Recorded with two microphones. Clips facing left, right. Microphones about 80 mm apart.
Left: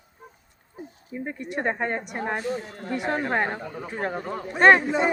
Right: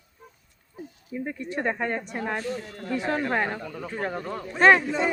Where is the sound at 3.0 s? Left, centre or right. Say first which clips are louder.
Left 1 dB; centre.